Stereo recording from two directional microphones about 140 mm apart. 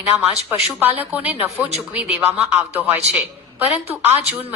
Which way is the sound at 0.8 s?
15° right (ahead or behind).